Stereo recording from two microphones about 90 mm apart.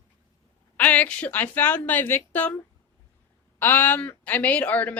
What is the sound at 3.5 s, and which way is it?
A woman's voice, 20° left (ahead or behind).